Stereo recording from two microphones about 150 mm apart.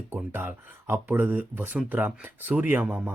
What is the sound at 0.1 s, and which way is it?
Speech, 15° right (ahead or behind).